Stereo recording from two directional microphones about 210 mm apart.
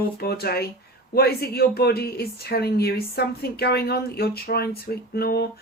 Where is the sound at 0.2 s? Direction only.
45° left (ahead or behind).